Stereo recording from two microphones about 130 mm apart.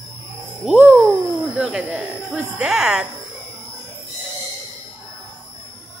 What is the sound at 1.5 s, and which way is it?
Speech, 10° right (ahead or behind).